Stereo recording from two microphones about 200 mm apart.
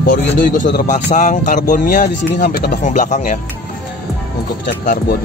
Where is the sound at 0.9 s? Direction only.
35° left (ahead or behind).